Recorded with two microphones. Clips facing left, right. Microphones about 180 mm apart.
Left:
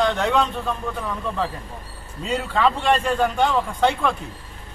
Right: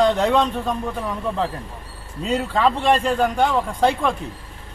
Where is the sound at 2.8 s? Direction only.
10° right (ahead or behind).